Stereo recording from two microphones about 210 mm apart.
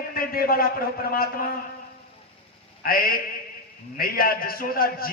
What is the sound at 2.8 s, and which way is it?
A man's voice, 45° left (ahead or behind).